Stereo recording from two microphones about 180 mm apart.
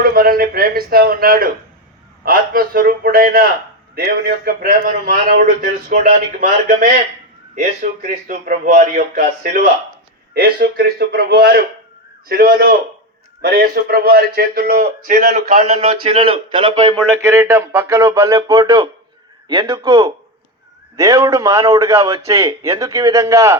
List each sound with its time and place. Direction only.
0.0 s a sound: 55° right (ahead or behind)
2.2 s a man's voice: 55° right (ahead or behind)
6.4 s a man's voice: 50° right (ahead or behind); by 17.0 s 30° right (ahead or behind)
17.2 s a man's voice: 15° right (ahead or behind)